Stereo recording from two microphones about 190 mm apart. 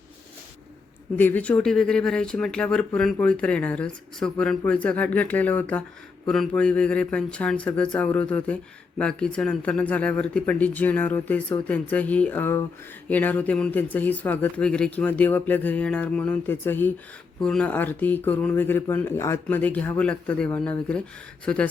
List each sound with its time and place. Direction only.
1.1 s speech: 10° left (ahead or behind)